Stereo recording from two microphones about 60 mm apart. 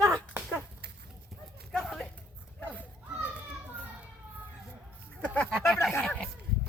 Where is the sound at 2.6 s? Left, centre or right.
Left.